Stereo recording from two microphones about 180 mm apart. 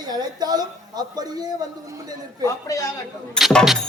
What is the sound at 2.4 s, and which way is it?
Speech, 20° left (ahead or behind).